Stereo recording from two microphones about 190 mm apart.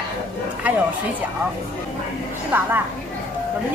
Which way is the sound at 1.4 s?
10° right (ahead or behind).